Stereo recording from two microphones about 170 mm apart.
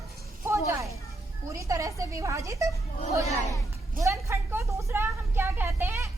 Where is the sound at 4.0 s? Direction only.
15° right (ahead or behind).